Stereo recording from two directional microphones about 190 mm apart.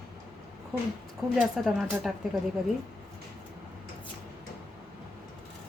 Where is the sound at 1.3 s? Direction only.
Centre (ahead or behind).